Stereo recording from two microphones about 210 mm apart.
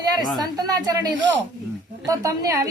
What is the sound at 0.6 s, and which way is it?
A woman's voice, 15° right (ahead or behind).